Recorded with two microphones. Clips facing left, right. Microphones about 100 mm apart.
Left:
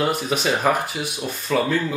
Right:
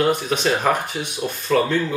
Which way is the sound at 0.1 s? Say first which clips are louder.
Right 2 dB; 5° left (ahead or behind).